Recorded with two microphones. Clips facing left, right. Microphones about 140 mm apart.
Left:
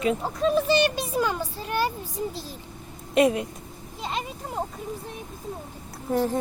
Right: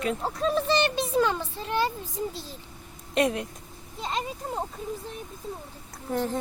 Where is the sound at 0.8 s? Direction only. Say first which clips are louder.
Left 1 dB; 25° right (ahead or behind).